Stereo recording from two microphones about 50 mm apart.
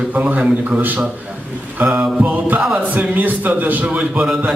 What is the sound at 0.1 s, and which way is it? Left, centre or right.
Speech, right.